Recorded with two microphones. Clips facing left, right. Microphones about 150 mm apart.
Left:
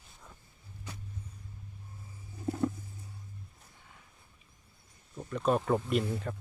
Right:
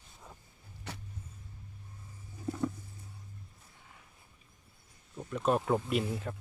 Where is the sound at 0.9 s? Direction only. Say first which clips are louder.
Right 2 dB; 70° right (ahead or behind).